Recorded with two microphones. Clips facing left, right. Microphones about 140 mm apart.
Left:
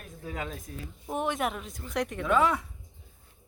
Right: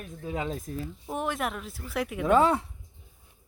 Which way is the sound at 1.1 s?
Centre (ahead or behind).